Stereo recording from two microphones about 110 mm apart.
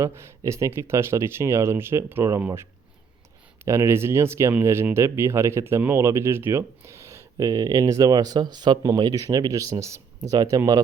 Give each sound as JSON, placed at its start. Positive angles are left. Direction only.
{"t": 0.0, "sound": "speech", "side_deg": -25}
{"t": 3.6, "sound": "speech", "side_deg": -25}